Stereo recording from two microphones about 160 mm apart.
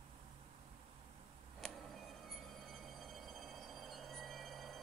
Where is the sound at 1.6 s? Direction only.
Centre (ahead or behind).